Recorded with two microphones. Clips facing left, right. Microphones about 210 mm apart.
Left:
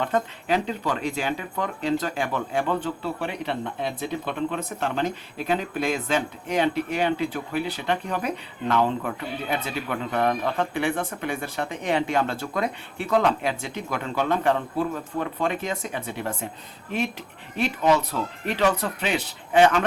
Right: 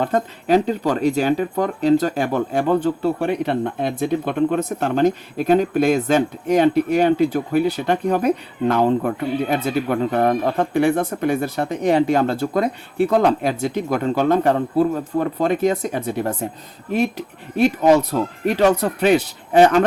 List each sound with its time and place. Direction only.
0.0 s speech: 40° right (ahead or behind)
17.6 s speech: 45° right (ahead or behind)